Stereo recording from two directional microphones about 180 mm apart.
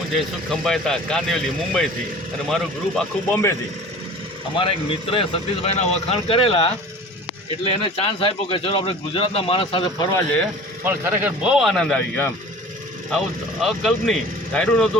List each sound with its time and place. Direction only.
0.1 s speech: centre (ahead or behind)
4.5 s speech: 30° left (ahead or behind)
10.8 s speech: 10° right (ahead or behind); by 12.3 s 10° left (ahead or behind)
13.6 s speech: centre (ahead or behind)